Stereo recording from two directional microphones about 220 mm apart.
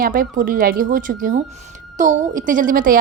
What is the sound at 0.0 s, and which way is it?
A woman's voice, 40° right (ahead or behind).